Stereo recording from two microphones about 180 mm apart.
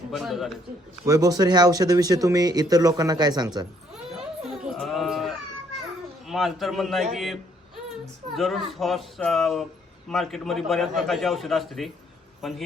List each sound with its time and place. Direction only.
0.1 s a man's voice: centre (ahead or behind)
1.0 s speech: 20° right (ahead or behind)
4.4 s sheep: centre (ahead or behind)
6.2 s a man's voice: centre (ahead or behind)
8.4 s a man's voice: centre (ahead or behind)